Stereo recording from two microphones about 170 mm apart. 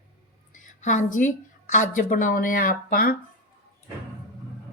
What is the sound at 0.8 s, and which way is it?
Speech, 45° left (ahead or behind).